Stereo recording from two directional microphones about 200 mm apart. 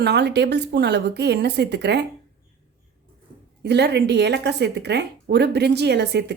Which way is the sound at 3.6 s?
55° right (ahead or behind).